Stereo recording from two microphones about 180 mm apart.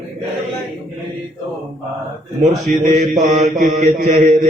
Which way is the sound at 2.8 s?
40° right (ahead or behind).